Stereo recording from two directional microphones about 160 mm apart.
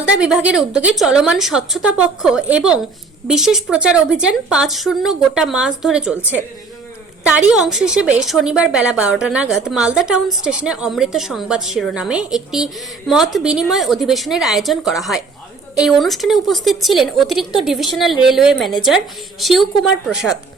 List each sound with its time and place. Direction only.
0.0 s a woman's voice: 5° right (ahead or behind)